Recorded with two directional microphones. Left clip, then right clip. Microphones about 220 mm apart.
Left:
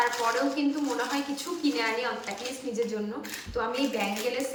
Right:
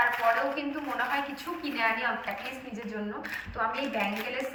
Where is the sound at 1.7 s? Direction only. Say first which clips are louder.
Right 4 dB; 15° left (ahead or behind).